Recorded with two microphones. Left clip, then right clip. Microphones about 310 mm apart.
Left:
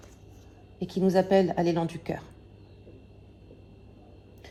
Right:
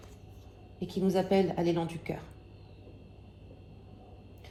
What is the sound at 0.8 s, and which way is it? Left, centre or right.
A woman's voice, left.